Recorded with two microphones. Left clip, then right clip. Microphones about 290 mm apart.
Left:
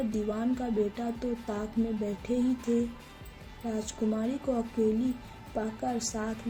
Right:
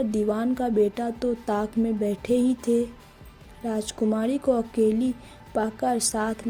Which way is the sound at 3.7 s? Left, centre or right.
Right.